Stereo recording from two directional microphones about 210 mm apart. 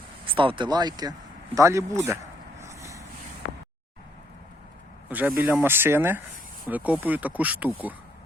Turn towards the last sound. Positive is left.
turn(degrees=-5)  # may be behind; listen again after turning